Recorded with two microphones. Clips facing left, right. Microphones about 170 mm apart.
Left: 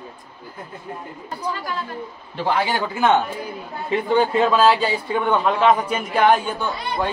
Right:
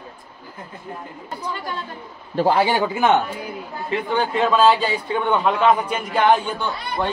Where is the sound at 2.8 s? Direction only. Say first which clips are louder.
Right 1 dB; 15° right (ahead or behind).